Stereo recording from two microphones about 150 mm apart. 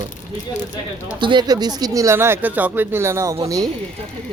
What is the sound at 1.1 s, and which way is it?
Speech, 30° right (ahead or behind).